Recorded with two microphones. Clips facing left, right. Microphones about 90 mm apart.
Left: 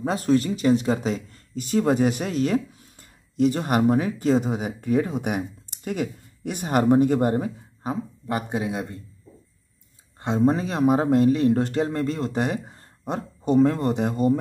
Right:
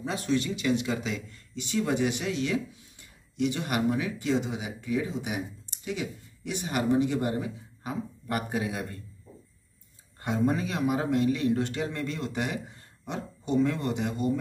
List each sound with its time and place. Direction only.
0.0 s speech: 45° left (ahead or behind); by 9.0 s 25° left (ahead or behind)
10.2 s a man's voice: 30° left (ahead or behind)